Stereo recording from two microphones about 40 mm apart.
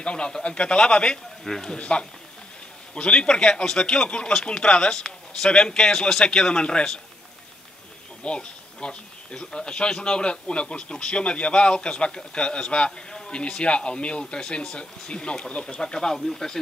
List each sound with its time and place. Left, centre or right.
0.0 s speech: left
1.4 s a man's voice: centre
1.8 s speech: left
4.9 s a man's voice: centre
8.2 s speech: left
15.8 s a man's voice: centre